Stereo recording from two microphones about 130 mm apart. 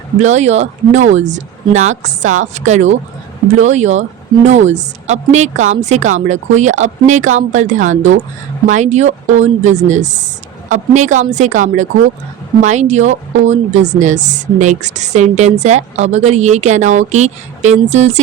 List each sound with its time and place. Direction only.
0.2 s speech: 60° right (ahead or behind)
12.6 s speech: 65° right (ahead or behind)